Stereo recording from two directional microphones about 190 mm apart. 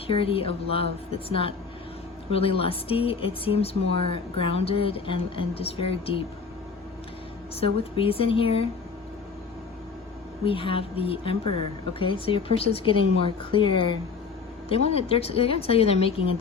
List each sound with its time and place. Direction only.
0.1 s speech: 30° left (ahead or behind)
7.6 s speech: 30° left (ahead or behind)
10.4 s speech: 30° left (ahead or behind)
14.9 s a woman's voice: 30° left (ahead or behind)